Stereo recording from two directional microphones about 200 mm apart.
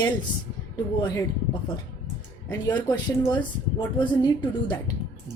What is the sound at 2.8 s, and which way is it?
Speech, 10° left (ahead or behind).